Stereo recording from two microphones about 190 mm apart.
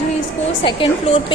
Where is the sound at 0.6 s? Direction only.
25° left (ahead or behind).